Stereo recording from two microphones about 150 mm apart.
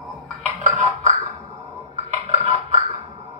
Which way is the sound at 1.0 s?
50° right (ahead or behind).